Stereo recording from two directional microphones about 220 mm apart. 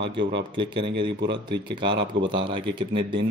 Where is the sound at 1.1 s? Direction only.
50° right (ahead or behind).